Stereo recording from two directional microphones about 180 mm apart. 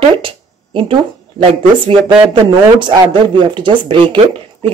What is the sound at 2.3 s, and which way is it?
Speech, 25° right (ahead or behind).